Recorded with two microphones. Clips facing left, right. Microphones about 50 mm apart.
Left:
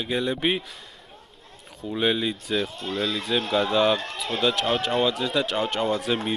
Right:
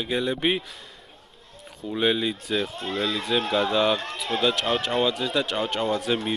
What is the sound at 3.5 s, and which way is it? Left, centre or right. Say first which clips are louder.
A man's voice: left 2 dB; centre.